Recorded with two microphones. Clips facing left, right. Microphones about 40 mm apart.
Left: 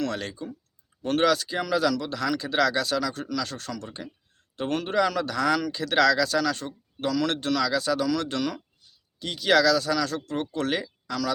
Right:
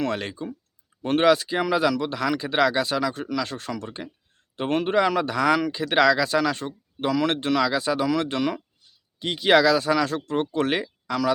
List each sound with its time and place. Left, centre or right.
0.0 s speech: right